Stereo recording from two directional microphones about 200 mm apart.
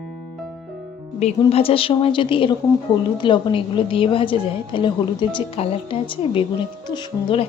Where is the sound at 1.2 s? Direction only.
30° left (ahead or behind).